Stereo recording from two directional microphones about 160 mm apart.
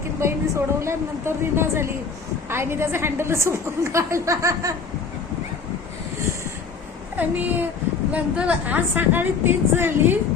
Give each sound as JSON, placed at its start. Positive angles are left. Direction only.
{"t": 0.2, "sound": "a woman's voice", "side_deg": -15}
{"t": 7.2, "sound": "a woman's voice", "side_deg": -10}